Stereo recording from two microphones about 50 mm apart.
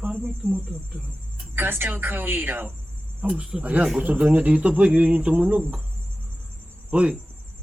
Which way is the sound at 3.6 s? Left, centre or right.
Right.